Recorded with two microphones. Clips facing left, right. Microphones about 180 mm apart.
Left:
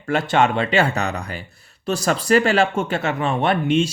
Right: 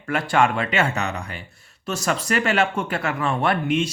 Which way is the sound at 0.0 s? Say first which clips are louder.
Left 2 dB; 25° left (ahead or behind).